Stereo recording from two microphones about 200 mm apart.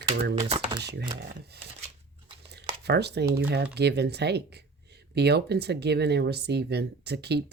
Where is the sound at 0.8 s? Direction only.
55° right (ahead or behind).